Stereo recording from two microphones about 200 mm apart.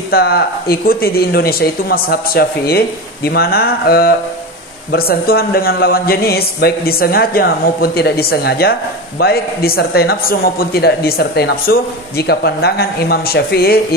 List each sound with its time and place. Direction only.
0.1 s speech: 50° left (ahead or behind)